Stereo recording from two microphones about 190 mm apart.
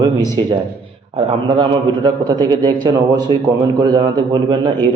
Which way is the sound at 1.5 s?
25° right (ahead or behind).